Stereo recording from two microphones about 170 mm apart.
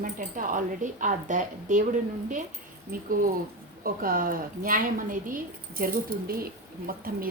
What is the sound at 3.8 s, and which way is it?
A woman's voice, 55° right (ahead or behind).